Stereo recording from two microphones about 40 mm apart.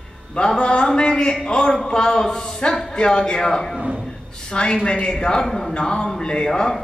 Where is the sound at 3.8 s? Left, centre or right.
Right.